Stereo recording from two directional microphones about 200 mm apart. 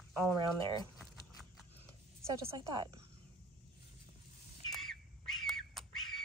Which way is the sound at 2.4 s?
20° right (ahead or behind).